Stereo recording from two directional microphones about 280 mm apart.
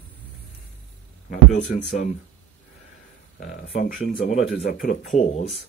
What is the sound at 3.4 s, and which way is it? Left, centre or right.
Speech, left.